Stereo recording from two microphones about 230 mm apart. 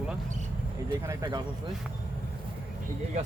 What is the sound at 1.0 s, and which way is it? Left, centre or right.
Speech, centre.